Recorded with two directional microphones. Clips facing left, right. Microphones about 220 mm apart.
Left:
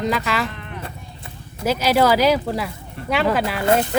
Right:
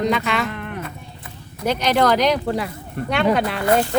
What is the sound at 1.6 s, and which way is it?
Speech, 5° left (ahead or behind).